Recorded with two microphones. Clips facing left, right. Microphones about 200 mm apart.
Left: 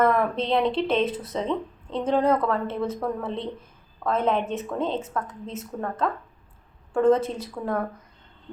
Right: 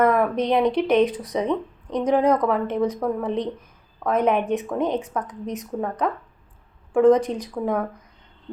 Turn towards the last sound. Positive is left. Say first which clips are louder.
# right 4 dB
turn(degrees=-15)  # may be behind; listen again after turning